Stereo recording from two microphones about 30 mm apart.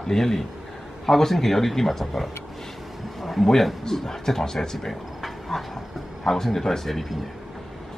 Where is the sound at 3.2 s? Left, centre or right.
Centre.